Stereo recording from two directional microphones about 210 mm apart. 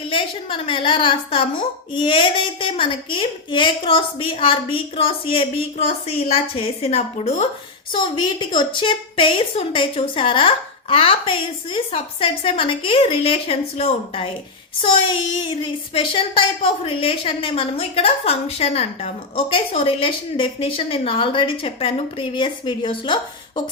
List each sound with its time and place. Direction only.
0.1 s a woman's voice: 25° left (ahead or behind)